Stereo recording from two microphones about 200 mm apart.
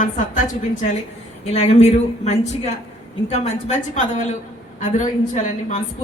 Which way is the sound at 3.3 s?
35° left (ahead or behind).